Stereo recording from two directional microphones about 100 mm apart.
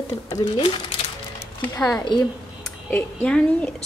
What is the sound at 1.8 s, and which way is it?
A woman's voice, 5° left (ahead or behind).